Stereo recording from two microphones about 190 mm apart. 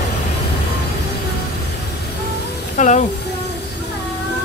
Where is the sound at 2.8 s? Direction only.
40° left (ahead or behind).